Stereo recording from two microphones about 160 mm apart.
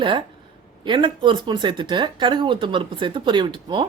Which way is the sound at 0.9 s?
30° right (ahead or behind).